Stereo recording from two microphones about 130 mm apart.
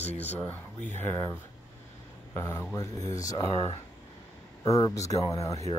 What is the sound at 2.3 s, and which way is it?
Speech, 25° left (ahead or behind).